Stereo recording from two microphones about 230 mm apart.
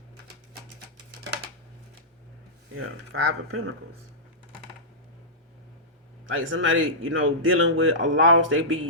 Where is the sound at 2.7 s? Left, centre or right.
Right.